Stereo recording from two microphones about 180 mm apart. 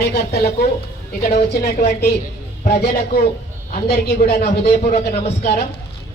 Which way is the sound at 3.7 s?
65° left (ahead or behind).